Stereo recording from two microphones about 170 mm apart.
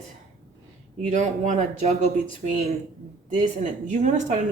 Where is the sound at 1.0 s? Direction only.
45° right (ahead or behind).